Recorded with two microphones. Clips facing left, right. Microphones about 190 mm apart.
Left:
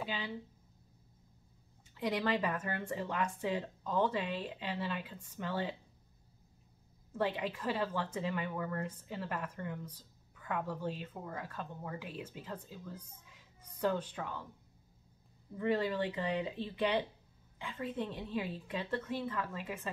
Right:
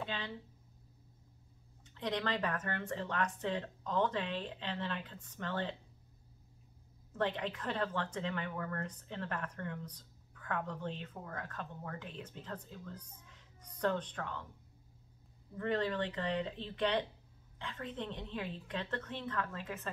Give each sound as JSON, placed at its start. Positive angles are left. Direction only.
{"t": 0.0, "sound": "speech", "side_deg": 5}
{"t": 2.0, "sound": "speech", "side_deg": 10}
{"t": 7.1, "sound": "speech", "side_deg": 10}
{"t": 15.5, "sound": "speech", "side_deg": 10}